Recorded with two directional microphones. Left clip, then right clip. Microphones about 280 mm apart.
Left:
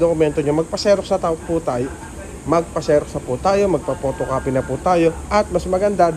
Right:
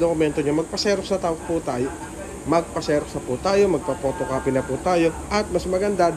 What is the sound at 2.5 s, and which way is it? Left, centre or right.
Speech, centre.